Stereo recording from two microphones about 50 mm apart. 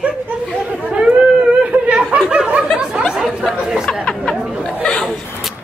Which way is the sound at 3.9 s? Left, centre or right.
Centre.